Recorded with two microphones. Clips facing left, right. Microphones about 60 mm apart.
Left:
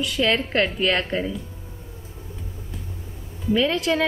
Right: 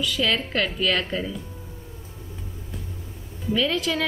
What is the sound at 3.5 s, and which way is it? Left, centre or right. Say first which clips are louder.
Speech: left 3 dB; left.